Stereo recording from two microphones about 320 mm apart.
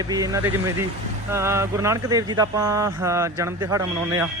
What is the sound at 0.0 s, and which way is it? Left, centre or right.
Speech, centre.